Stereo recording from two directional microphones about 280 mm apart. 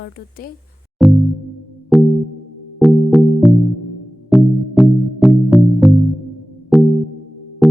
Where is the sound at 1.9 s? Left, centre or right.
Centre.